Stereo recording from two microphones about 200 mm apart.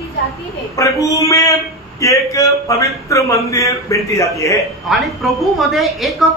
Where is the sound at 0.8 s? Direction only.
15° left (ahead or behind).